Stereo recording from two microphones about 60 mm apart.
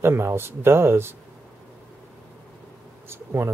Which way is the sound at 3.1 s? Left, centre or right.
Right.